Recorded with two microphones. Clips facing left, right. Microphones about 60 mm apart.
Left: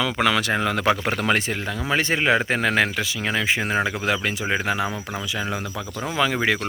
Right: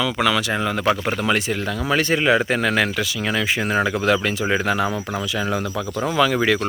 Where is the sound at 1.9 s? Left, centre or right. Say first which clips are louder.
Right 2 dB; left.